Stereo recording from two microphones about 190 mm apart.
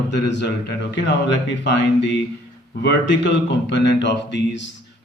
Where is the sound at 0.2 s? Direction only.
65° left (ahead or behind).